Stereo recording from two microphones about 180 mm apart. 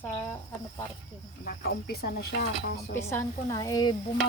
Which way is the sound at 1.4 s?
60° left (ahead or behind).